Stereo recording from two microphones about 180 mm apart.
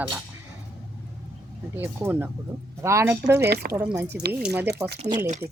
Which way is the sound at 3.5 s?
60° right (ahead or behind).